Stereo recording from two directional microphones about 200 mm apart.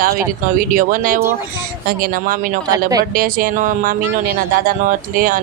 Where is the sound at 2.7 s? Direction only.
20° right (ahead or behind).